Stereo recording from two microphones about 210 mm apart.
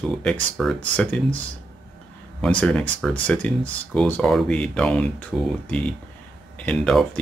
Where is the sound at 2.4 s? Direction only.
5° left (ahead or behind).